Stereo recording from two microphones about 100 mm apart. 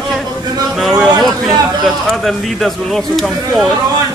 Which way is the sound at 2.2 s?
5° left (ahead or behind).